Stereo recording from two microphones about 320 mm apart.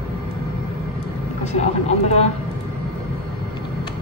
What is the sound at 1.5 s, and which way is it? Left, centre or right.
Speech, left.